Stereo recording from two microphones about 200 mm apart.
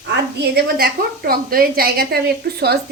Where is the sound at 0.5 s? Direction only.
50° right (ahead or behind).